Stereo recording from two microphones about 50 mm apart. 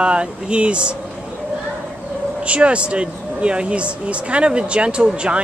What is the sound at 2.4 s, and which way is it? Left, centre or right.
Speech, right.